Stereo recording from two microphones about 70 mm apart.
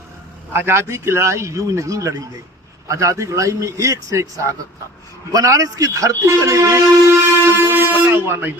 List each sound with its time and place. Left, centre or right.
0.5 s a man's voice: right
7.7 s speech: right